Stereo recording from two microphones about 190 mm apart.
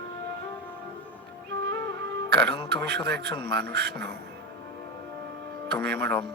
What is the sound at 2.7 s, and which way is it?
Speech, 60° right (ahead or behind).